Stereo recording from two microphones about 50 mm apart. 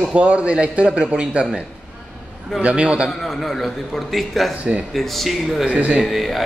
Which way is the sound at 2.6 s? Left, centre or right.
Right.